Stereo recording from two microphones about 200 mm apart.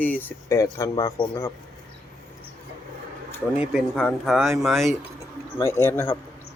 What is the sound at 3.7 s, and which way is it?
Speech, centre (ahead or behind).